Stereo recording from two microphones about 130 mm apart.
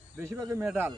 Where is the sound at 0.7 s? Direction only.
15° right (ahead or behind).